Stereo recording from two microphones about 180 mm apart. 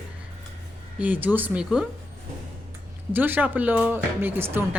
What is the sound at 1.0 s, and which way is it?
Speech, 10° right (ahead or behind).